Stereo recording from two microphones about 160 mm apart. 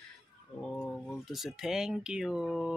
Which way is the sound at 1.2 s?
Centre (ahead or behind).